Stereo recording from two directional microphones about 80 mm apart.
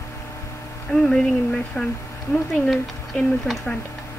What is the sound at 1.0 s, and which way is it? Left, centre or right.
Speech, centre.